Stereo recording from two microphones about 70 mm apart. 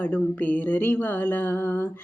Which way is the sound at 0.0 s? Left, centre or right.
Left.